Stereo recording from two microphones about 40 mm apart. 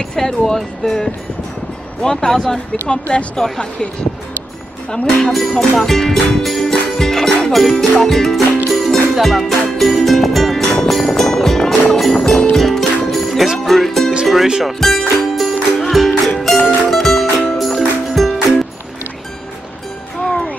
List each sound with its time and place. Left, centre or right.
0.1 s speech: centre
2.9 s speech: left
5.3 s speech: centre
9.1 s music: centre
12.5 s music: centre
14.2 s speech: centre
14.6 s music: centre
20.2 s music: centre